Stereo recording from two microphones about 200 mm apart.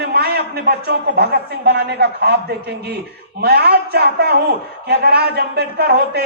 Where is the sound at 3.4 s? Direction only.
55° right (ahead or behind).